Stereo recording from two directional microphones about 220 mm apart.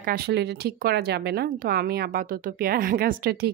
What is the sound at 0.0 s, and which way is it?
A woman's voice, 45° right (ahead or behind).